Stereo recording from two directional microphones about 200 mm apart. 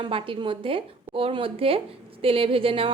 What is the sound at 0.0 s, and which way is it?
A woman's voice, 25° right (ahead or behind).